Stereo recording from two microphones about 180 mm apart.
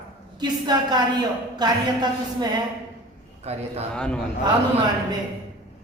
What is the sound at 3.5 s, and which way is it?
Speech, 35° right (ahead or behind).